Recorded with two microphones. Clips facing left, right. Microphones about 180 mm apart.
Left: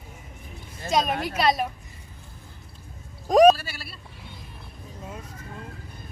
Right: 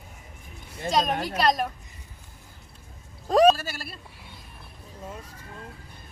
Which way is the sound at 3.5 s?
45° right (ahead or behind).